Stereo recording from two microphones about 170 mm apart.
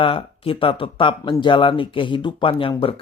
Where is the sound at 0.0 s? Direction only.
30° left (ahead or behind).